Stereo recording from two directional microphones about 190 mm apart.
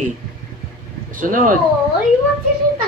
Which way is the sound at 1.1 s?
45° right (ahead or behind).